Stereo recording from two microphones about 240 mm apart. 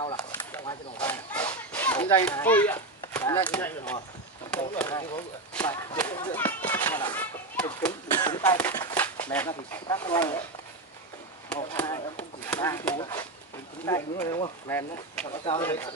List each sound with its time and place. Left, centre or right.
0.0 s a sound: centre
2.2 s speech: centre
11.4 s speech: centre
11.8 s speech: centre